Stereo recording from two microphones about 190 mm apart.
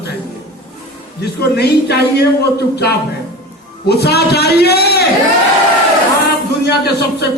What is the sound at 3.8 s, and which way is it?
A man's voice, 60° left (ahead or behind).